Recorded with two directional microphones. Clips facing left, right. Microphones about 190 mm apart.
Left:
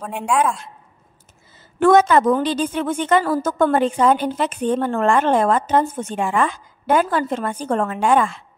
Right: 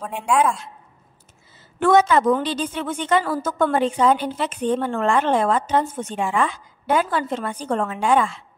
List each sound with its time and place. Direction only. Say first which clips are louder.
0.3 s a woman's voice: even; centre (ahead or behind)
1.8 s a woman's voice: left 3 dB; 50° left (ahead or behind)